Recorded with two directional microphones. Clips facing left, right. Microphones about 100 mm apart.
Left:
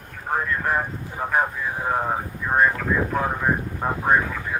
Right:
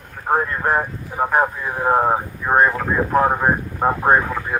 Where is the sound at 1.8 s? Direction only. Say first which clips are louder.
Right 8 dB; 45° right (ahead or behind).